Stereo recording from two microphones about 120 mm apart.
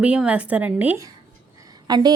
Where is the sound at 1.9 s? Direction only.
35° right (ahead or behind).